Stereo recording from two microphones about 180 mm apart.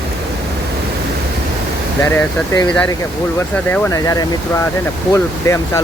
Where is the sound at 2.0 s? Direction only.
10° left (ahead or behind).